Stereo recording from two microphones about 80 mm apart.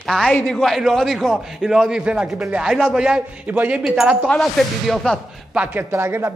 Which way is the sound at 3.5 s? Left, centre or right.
Right.